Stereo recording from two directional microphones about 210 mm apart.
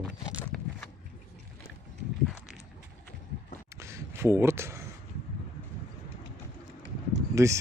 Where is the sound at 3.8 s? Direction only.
15° right (ahead or behind).